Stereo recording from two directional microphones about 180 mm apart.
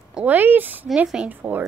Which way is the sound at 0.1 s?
10° right (ahead or behind).